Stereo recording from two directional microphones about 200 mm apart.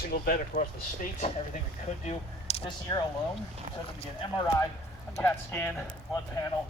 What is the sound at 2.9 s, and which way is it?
Speech, 20° left (ahead or behind).